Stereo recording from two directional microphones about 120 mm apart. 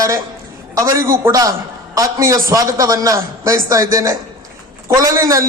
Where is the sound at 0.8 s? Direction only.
25° right (ahead or behind).